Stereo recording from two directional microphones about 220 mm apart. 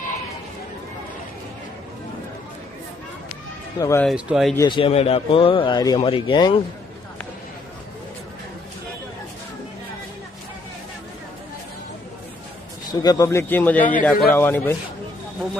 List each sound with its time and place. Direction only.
3.8 s a man's voice: 15° left (ahead or behind)
4.0 s speech: centre (ahead or behind)
4.5 s speech: 20° left (ahead or behind)
12.9 s a man's voice: 15° left (ahead or behind)